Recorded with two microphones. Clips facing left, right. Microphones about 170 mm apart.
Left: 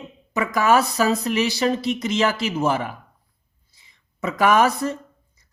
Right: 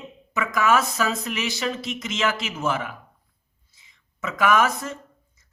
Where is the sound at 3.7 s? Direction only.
35° left (ahead or behind).